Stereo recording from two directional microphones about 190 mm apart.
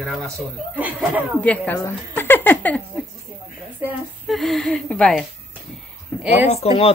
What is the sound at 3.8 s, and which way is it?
Speech, 10° right (ahead or behind).